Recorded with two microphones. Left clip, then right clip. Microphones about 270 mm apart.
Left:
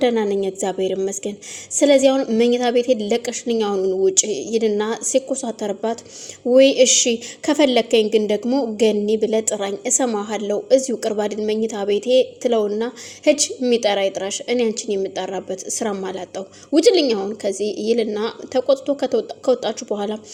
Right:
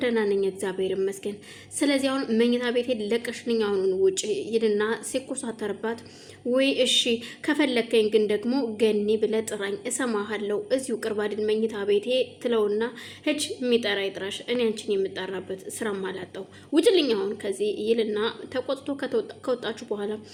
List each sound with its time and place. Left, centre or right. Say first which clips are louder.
0.0 s a woman's voice: left 5 dB; centre